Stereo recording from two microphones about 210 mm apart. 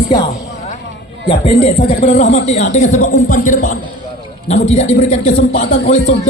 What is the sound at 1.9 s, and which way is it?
Speech, 40° left (ahead or behind).